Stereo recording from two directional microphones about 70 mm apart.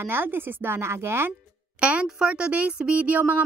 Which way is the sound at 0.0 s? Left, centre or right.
Right.